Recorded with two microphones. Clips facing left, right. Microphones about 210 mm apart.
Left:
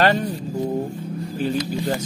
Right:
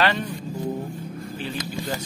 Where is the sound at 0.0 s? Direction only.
45° left (ahead or behind).